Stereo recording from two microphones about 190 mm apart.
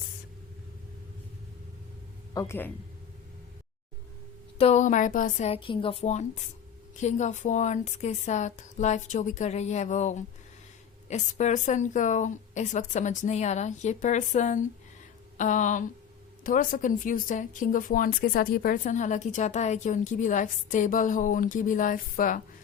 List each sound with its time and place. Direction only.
2.3 s speech: 15° left (ahead or behind)
4.5 s a woman's voice: 35° left (ahead or behind)